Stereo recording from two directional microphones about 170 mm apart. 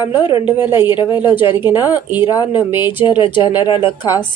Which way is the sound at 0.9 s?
30° left (ahead or behind).